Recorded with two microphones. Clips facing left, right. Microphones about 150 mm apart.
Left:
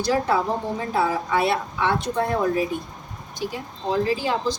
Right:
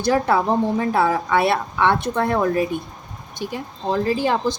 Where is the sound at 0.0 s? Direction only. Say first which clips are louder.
Right 3 dB; 60° right (ahead or behind).